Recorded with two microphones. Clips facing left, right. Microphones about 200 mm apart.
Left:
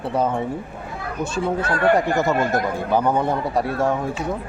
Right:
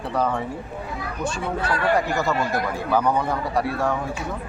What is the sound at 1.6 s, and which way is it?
Speech, 50° left (ahead or behind).